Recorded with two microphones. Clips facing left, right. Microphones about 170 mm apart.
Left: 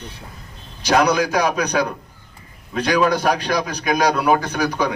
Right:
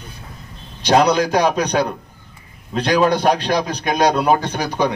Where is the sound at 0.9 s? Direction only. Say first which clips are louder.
Right 2 dB; 30° right (ahead or behind).